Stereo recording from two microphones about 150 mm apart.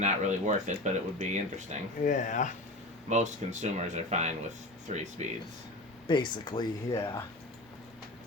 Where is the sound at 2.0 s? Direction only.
60° left (ahead or behind).